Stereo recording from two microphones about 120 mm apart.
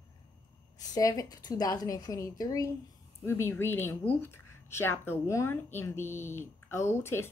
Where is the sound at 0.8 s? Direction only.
30° left (ahead or behind).